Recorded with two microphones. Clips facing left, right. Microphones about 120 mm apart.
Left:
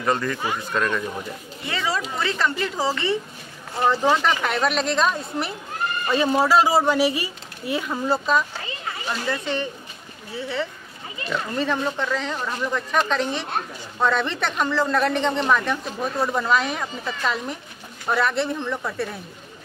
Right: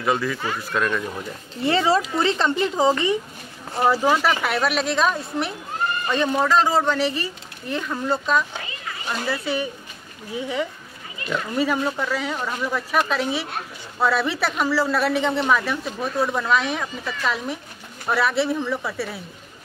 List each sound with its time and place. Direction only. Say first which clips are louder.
0.0 s speech: even; 5° right (ahead or behind)
1.6 s speech: right 8 dB; 30° right (ahead or behind); by 8.5 s 5° left (ahead or behind)
9.3 s speech: right 1 dB; 10° right (ahead or behind)